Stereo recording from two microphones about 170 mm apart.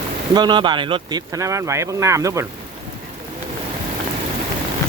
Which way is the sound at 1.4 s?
20° right (ahead or behind).